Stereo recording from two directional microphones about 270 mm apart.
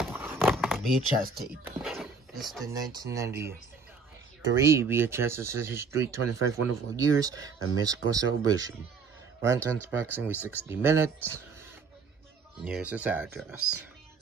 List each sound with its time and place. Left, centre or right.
0.0 s a sound: centre
1.2 s speech: right
1.6 s a sound: centre
2.7 s speech: centre
4.6 s speech: centre
12.6 s speech: centre
13.6 s speech: right